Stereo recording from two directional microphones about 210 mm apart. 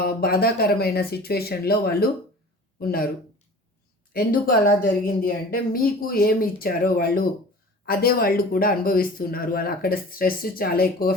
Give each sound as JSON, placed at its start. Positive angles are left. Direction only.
{"t": 0.0, "sound": "speech", "side_deg": 45}
{"t": 4.1, "sound": "speech", "side_deg": 45}